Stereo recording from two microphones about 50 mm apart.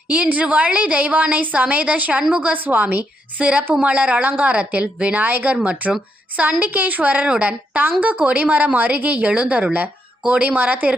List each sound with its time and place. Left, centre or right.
0.1 s a woman's voice: right
5.9 s a woman's voice: right